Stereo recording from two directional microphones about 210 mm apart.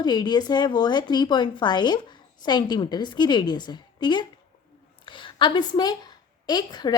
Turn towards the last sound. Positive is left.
turn(degrees=20)  # may be behind; listen again after turning